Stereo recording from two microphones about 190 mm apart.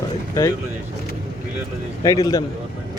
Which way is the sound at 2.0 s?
20° left (ahead or behind).